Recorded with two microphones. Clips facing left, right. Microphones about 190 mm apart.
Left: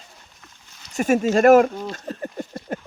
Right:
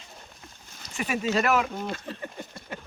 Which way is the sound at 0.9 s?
45° left (ahead or behind).